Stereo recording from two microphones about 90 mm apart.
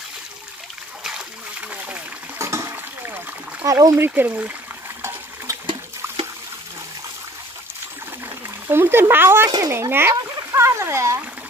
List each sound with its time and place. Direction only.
2.3 s water: 35° right (ahead or behind)
2.7 s splash: 20° right (ahead or behind)
3.6 s speech: 35° right (ahead or behind)
4.1 s speech: 20° right (ahead or behind)
6.0 s trickle: 30° right (ahead or behind)
8.6 s speech: 25° right (ahead or behind)